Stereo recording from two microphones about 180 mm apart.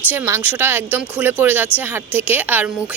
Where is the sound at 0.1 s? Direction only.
10° right (ahead or behind).